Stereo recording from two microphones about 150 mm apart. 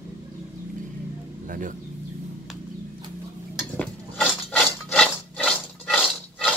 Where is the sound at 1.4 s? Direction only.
60° right (ahead or behind).